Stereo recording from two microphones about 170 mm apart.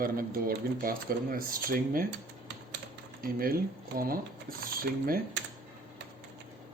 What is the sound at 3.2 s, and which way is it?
Speech, 60° right (ahead or behind).